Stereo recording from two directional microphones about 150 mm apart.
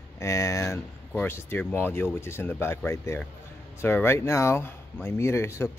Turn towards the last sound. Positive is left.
turn(degrees=15)  # may be behind; listen again after turning